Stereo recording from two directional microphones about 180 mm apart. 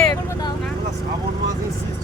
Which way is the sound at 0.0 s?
15° left (ahead or behind).